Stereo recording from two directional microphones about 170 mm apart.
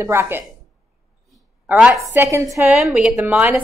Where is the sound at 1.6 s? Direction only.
5° right (ahead or behind).